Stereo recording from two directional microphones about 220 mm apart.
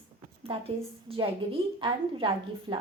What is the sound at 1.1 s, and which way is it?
A woman's voice, 25° right (ahead or behind).